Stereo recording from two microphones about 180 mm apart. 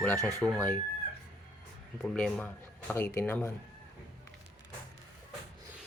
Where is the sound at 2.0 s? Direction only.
5° left (ahead or behind).